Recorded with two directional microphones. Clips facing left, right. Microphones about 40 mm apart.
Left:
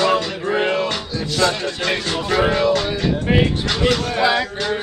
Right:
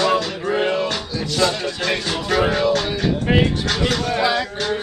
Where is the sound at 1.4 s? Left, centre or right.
Left.